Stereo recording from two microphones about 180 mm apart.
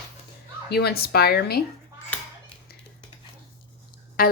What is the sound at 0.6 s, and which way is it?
Speech, 65° left (ahead or behind).